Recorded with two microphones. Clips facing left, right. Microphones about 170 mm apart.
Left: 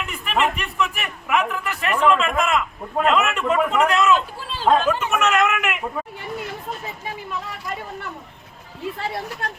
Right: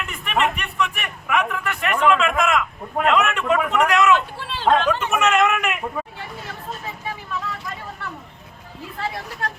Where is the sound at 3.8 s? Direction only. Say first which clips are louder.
Right 1 dB; 35° left (ahead or behind).